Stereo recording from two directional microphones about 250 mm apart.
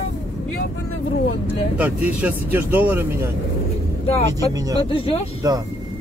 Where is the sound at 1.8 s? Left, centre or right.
Centre.